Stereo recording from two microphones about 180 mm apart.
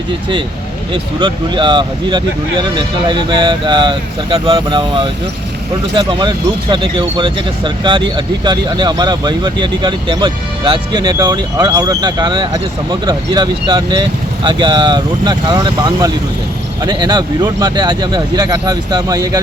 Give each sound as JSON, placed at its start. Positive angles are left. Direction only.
{"t": 1.2, "sound": "speech", "side_deg": -25}